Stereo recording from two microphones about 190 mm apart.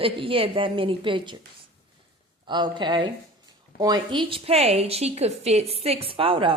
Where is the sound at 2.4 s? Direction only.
25° right (ahead or behind).